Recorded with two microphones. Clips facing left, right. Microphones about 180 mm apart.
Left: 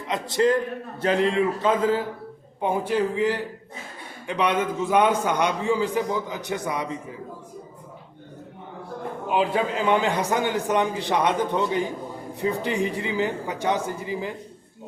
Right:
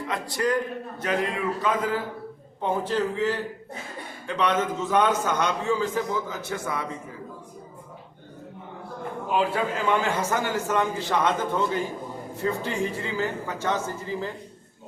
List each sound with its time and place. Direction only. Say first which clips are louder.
0.1 s a man's voice: left 5 dB; 25° left (ahead or behind)
2.6 s a man's voice: left 2 dB; 10° left (ahead or behind)
9.3 s a man's voice: left 2 dB; 20° left (ahead or behind)